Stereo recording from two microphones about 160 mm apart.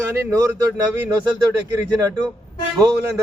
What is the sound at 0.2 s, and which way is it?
Speech, 20° right (ahead or behind).